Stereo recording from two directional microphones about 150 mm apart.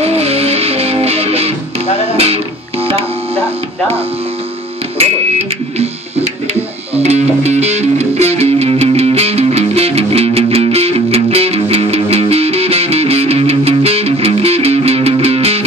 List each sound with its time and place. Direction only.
0.0 s music: 45° right (ahead or behind)
7.0 s music: 45° right (ahead or behind)